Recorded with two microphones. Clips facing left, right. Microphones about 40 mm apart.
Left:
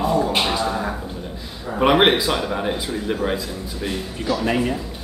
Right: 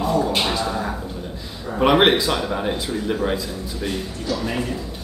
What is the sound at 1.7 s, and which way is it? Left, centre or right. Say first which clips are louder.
Speech: even; centre.